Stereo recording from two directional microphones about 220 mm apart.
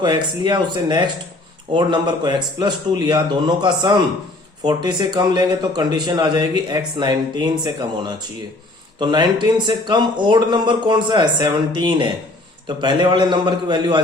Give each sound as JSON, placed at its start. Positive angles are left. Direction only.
{"t": 0.0, "sound": "speech", "side_deg": -20}